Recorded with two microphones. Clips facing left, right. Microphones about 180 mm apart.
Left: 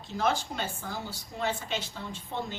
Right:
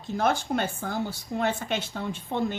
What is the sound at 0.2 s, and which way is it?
Speech, 55° right (ahead or behind).